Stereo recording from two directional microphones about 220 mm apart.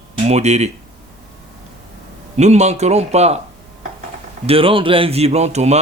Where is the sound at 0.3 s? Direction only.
30° right (ahead or behind).